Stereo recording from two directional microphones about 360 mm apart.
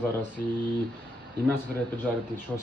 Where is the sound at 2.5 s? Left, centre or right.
Centre.